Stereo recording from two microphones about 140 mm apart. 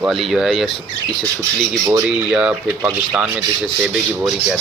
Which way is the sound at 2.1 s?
5° right (ahead or behind).